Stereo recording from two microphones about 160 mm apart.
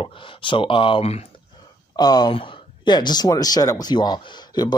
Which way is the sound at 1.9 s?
25° left (ahead or behind).